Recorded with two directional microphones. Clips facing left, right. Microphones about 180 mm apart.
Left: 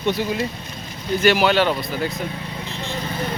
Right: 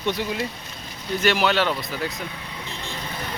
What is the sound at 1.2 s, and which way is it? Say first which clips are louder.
Speech: left 4 dB; centre (ahead or behind).